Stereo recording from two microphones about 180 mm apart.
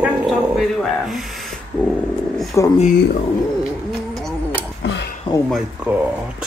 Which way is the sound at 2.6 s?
15° left (ahead or behind).